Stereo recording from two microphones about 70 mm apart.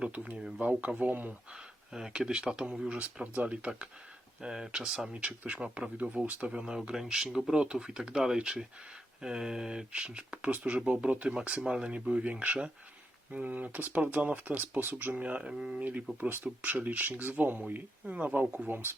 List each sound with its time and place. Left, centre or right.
0.0 s speech: centre
1.5 s speech: centre
5.1 s speech: right